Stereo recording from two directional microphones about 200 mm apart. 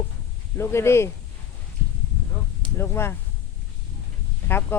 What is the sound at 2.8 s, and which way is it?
Speech, 10° left (ahead or behind).